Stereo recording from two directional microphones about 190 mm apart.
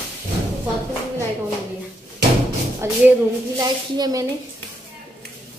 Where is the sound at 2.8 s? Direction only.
15° right (ahead or behind).